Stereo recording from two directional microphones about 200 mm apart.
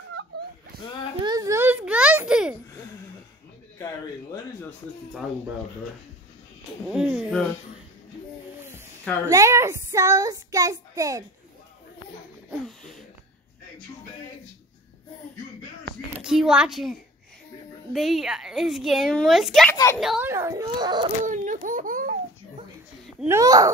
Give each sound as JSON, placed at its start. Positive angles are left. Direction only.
{"t": 1.2, "sound": "a sound", "side_deg": -20}
{"t": 3.7, "sound": "speech", "side_deg": 15}
{"t": 6.9, "sound": "a woman's voice", "side_deg": -5}
{"t": 9.3, "sound": "a child's voice", "side_deg": -15}
{"t": 12.4, "sound": "a sound", "side_deg": 5}
{"t": 16.2, "sound": "a woman's voice", "side_deg": -5}
{"t": 19.7, "sound": "speech", "side_deg": 15}
{"t": 20.0, "sound": "a woman's voice", "side_deg": 0}
{"t": 20.2, "sound": "a child's voice", "side_deg": -15}
{"t": 21.2, "sound": "a sound", "side_deg": -40}
{"t": 23.2, "sound": "a child's voice", "side_deg": -15}